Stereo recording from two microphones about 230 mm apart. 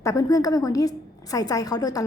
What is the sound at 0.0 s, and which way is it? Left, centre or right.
A woman's voice, centre.